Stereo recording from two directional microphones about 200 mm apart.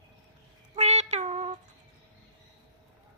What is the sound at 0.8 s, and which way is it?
Child singing, 35° right (ahead or behind).